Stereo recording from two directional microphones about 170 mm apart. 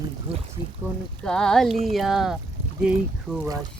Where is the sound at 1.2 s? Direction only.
5° left (ahead or behind).